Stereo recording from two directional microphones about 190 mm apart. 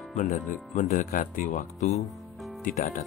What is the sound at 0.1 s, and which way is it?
Speech, 40° left (ahead or behind).